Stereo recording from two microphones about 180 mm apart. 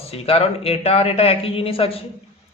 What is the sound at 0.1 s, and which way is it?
Speech, 35° left (ahead or behind).